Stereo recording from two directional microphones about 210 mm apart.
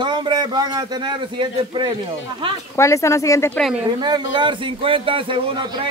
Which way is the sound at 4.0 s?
20° right (ahead or behind).